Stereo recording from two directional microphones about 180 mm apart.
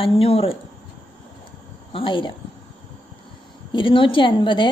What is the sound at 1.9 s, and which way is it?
Speech, 30° left (ahead or behind).